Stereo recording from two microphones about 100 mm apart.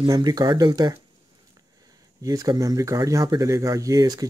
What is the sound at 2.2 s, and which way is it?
Speech, 40° right (ahead or behind).